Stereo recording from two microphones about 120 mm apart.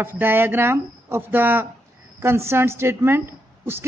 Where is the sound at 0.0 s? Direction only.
15° right (ahead or behind).